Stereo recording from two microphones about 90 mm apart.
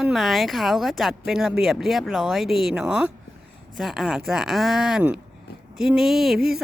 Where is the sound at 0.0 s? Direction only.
Centre (ahead or behind).